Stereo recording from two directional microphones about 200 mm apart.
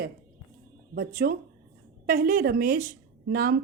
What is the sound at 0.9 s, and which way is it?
Speech, 50° right (ahead or behind).